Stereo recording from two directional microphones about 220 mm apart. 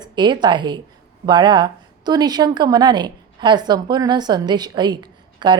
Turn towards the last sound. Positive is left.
turn(degrees=-20)  # may be behind; listen again after turning